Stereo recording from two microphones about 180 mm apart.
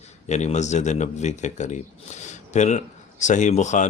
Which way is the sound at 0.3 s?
40° left (ahead or behind).